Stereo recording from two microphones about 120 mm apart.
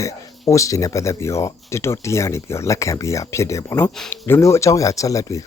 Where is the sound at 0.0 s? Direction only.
25° left (ahead or behind).